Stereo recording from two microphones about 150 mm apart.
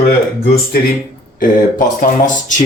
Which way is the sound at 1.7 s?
60° left (ahead or behind).